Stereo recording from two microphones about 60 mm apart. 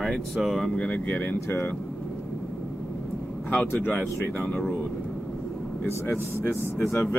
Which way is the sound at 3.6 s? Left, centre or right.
Left.